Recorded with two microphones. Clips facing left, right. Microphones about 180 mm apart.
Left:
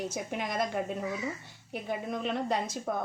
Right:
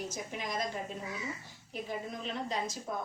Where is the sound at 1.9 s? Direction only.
60° left (ahead or behind).